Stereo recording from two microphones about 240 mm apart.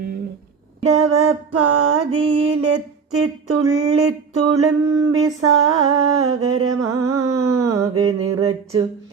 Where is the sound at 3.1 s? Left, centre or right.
Right.